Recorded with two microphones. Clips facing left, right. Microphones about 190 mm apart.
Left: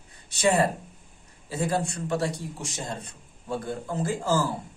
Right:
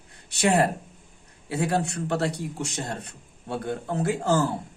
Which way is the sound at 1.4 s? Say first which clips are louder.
Right 2 dB; 65° right (ahead or behind).